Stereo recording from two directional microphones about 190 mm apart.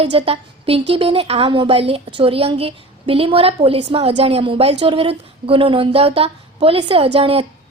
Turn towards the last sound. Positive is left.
turn(degrees=-30)  # may be behind; listen again after turning